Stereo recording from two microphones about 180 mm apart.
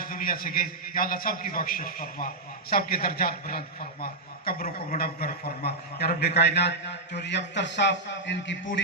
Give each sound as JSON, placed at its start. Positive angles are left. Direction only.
{"t": 0.0, "sound": "a man's voice", "side_deg": 50}